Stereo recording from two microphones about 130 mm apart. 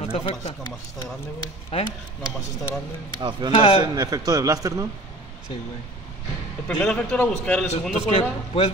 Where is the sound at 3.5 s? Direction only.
45° left (ahead or behind).